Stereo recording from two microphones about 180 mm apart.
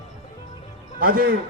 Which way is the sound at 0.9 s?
55° right (ahead or behind).